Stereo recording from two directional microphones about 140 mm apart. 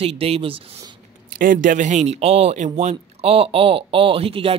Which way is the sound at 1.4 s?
70° right (ahead or behind).